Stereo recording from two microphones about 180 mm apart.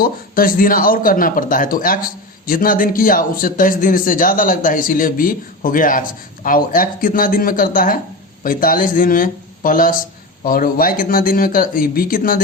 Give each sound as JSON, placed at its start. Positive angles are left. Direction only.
{"t": 0.0, "sound": "speech", "side_deg": 55}